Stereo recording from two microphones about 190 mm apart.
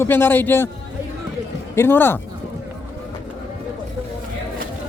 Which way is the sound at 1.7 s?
10° left (ahead or behind).